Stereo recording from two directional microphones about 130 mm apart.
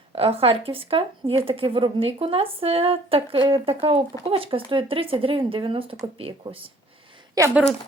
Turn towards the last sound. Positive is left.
turn(degrees=-25)  # may be behind; listen again after turning